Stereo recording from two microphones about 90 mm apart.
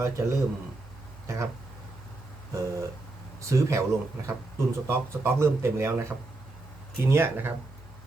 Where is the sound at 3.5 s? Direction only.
35° right (ahead or behind).